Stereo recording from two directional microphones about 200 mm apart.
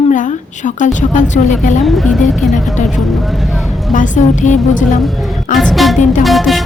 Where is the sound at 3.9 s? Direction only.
40° left (ahead or behind).